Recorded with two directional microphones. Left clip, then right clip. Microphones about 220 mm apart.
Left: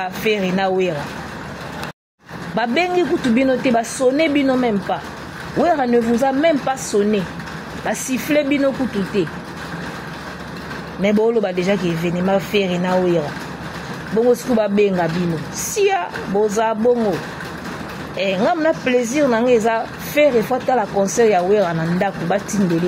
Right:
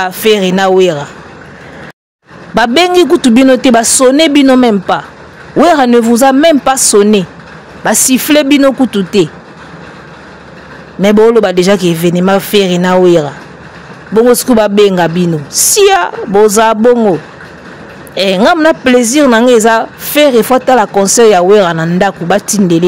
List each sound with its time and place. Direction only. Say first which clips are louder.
0.0 s speech: right 11 dB; 45° right (ahead or behind)
2.5 s speech: right 11 dB; 45° right (ahead or behind)
11.0 s speech: right 11 dB; 45° right (ahead or behind)
14.3 s speech: right 9 dB; 45° right (ahead or behind)
18.1 s speech: right 10 dB; 45° right (ahead or behind)